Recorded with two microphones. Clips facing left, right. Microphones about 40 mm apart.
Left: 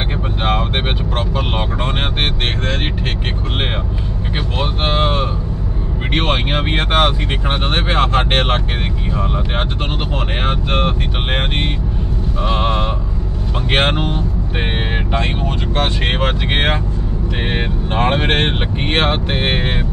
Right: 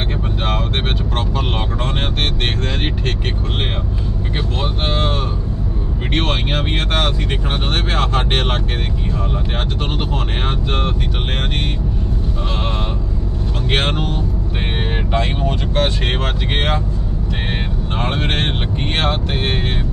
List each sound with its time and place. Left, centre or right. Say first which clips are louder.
0.4 s vehicle: left 5 dB; centre
1.1 s speech: left 2 dB; centre
4.6 s speech: left 4 dB; left
10.4 s speech: left 5 dB; left
12.4 s speech: left 7 dB; left
15.1 s speech: right 2 dB; centre
16.1 s speech: left 3 dB; left